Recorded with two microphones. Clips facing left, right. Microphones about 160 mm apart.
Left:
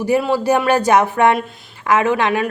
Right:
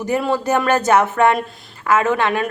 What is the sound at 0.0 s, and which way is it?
Speech, 10° left (ahead or behind).